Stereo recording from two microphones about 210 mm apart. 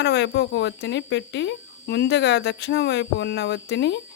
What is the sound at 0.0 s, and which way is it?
Speech, 55° left (ahead or behind).